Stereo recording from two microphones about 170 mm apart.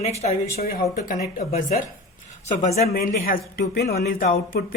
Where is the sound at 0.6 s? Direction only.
60° left (ahead or behind); by 2.8 s 45° left (ahead or behind).